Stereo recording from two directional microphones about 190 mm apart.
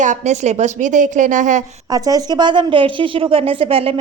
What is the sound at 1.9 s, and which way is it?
A woman's voice, 20° right (ahead or behind).